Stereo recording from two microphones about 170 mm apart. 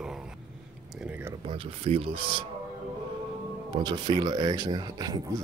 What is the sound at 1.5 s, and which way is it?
Speech, 30° right (ahead or behind).